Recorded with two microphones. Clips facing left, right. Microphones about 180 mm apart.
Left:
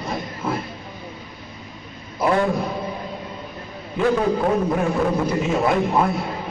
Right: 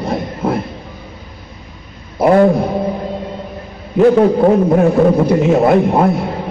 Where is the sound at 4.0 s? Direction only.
40° right (ahead or behind).